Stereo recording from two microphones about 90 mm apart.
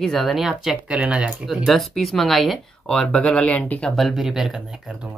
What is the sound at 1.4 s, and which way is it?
Speech, centre (ahead or behind).